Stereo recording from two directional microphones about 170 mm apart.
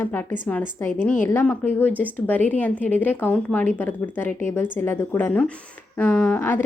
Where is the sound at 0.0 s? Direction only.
10° left (ahead or behind).